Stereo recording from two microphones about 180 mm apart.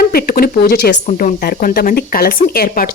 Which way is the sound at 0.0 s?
55° left (ahead or behind).